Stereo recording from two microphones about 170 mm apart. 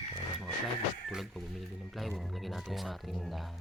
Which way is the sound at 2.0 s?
Centre (ahead or behind).